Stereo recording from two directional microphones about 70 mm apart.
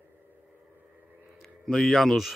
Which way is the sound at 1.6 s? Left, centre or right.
Centre.